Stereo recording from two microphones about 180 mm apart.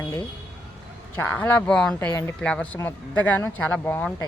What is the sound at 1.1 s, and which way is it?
Speech, 10° left (ahead or behind).